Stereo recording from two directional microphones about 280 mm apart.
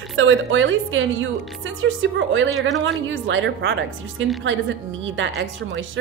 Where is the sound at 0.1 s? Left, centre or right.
Right.